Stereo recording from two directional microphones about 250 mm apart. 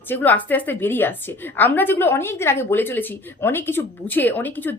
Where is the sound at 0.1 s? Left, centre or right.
Centre.